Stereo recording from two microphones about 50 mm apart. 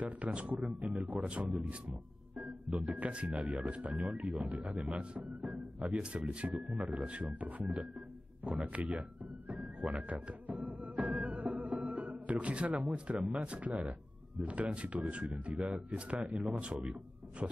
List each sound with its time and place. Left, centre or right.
0.0 s speech: right
1.0 s speech: right
3.9 s speech: centre
4.5 s speech: right
4.9 s speech: right
9.5 s music: right
12.9 s speech: right